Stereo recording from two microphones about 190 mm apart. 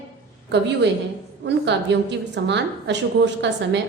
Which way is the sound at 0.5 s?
65° right (ahead or behind).